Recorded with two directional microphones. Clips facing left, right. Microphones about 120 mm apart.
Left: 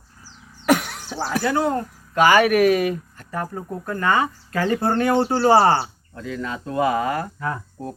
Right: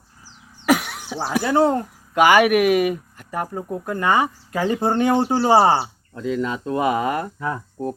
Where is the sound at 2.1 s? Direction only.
15° right (ahead or behind).